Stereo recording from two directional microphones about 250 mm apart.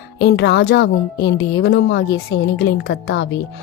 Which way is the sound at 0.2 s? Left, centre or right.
Left.